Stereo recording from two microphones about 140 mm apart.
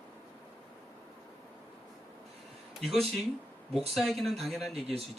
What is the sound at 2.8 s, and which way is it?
Speech, centre (ahead or behind).